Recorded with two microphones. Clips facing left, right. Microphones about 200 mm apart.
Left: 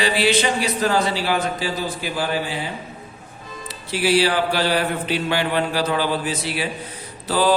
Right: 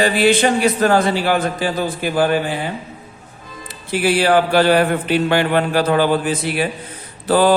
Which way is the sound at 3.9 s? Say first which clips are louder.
Right 4 dB; 50° right (ahead or behind).